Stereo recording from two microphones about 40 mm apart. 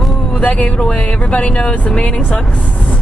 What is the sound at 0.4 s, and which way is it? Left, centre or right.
Speech, left.